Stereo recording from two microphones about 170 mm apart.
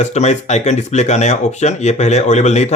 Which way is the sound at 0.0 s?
40° left (ahead or behind).